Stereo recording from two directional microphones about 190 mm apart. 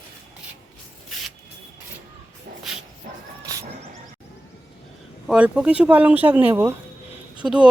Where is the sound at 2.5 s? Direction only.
55° right (ahead or behind).